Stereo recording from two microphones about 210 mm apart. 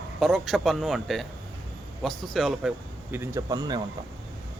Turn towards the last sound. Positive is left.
turn(degrees=-20)  # may be behind; listen again after turning